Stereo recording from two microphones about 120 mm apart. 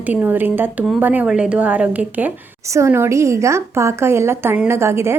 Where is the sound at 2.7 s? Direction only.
20° right (ahead or behind).